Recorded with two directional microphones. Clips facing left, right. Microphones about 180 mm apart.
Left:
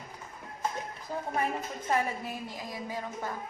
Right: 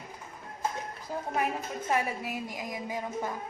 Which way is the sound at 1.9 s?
10° right (ahead or behind).